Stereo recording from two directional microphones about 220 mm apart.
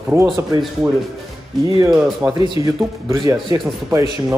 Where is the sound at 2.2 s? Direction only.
20° right (ahead or behind).